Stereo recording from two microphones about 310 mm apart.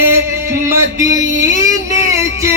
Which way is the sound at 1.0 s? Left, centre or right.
Centre.